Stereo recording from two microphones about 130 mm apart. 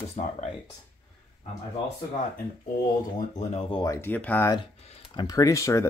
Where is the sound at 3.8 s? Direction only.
20° left (ahead or behind).